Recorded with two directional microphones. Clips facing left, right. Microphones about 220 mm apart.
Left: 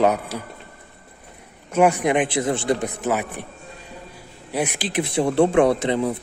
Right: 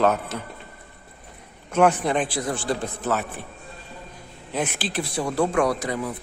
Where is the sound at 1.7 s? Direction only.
10° left (ahead or behind).